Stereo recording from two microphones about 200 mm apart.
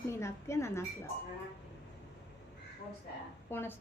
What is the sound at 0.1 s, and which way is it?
Speech, 15° left (ahead or behind).